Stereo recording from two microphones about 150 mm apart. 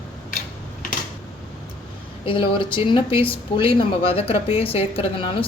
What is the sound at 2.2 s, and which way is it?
Speech, 35° left (ahead or behind).